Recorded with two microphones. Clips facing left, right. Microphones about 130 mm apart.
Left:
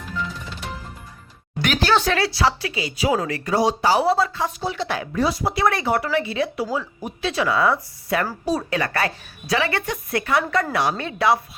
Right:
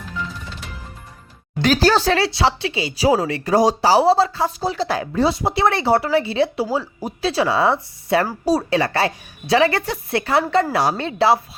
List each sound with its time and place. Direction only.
1.6 s speech: 40° right (ahead or behind)
3.5 s speech: 40° right (ahead or behind)